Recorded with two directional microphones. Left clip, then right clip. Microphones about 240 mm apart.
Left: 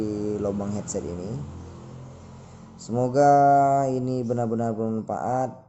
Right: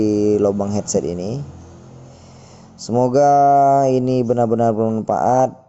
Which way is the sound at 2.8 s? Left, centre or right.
Right.